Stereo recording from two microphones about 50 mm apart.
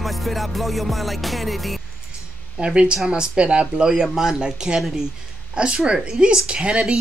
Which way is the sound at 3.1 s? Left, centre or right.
Centre.